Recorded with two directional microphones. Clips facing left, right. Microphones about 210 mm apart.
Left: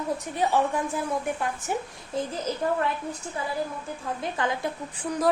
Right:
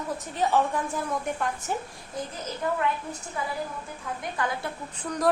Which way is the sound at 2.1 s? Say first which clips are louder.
Left 5 dB; 25° left (ahead or behind).